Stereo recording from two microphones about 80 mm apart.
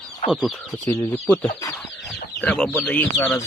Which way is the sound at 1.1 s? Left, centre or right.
Centre.